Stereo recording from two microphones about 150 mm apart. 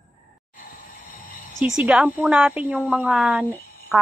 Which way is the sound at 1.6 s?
10° right (ahead or behind).